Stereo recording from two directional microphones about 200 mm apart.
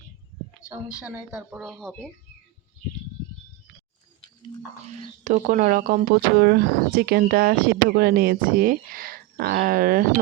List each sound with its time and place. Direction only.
1.0 s speech: 5° right (ahead or behind)
4.8 s speech: 35° right (ahead or behind)